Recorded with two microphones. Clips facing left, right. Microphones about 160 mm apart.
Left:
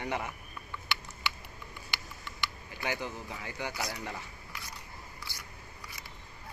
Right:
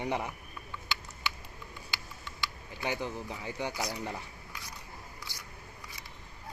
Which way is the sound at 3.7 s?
15° right (ahead or behind).